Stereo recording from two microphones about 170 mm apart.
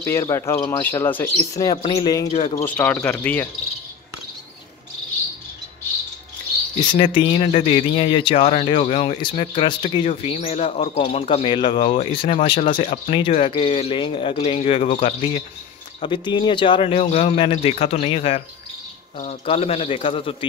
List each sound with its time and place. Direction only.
0.0 s speech: 15° left (ahead or behind)
2.2 s speech: 35° left (ahead or behind)
2.6 s speech: 10° left (ahead or behind)
6.8 s speech: 25° left (ahead or behind)
16.0 s speech: 25° left (ahead or behind)